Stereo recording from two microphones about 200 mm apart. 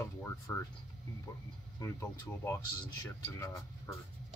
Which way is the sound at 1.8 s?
15° left (ahead or behind).